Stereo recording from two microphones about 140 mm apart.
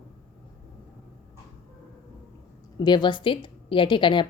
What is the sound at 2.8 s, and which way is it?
A woman's voice, 30° left (ahead or behind).